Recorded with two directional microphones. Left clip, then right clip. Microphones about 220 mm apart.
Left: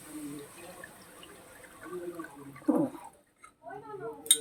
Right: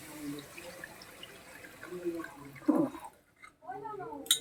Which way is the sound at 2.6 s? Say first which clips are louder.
Left 1 dB; 5° left (ahead or behind).